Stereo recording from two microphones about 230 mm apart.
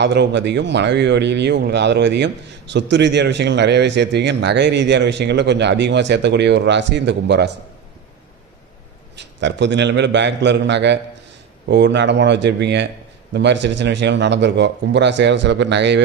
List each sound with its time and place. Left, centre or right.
0.0 s speech: right
9.1 s speech: right